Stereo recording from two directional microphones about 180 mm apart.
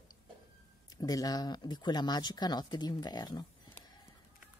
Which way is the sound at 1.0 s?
20° left (ahead or behind).